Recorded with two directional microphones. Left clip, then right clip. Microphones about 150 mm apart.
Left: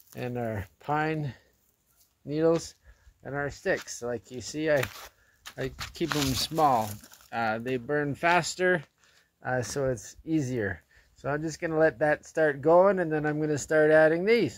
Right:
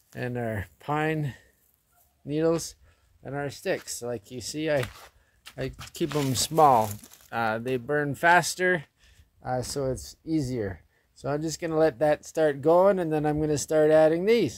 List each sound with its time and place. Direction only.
0.1 s speech: 35° right (ahead or behind)
3.2 s speech: 5° right (ahead or behind)
6.3 s speech: 45° right (ahead or behind); by 8.8 s 25° right (ahead or behind)
9.4 s speech: 10° right (ahead or behind)
11.1 s speech: 25° right (ahead or behind)